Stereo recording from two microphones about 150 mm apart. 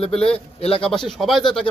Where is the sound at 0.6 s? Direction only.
40° left (ahead or behind).